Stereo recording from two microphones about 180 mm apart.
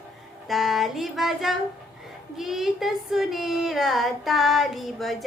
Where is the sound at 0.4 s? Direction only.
Centre (ahead or behind).